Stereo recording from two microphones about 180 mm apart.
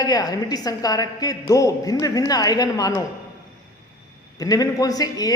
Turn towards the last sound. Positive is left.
turn(degrees=20)  # may be behind; listen again after turning